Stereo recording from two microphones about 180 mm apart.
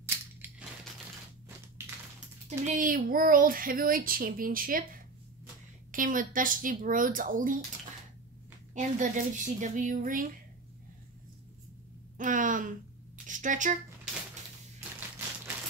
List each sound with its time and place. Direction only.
0.0 s crushing: 10° right (ahead or behind)
2.6 s speech: 45° right (ahead or behind)
5.9 s speech: 50° right (ahead or behind)
8.7 s speech: 45° right (ahead or behind)
12.2 s speech: 45° right (ahead or behind)
14.8 s a sound: 10° right (ahead or behind)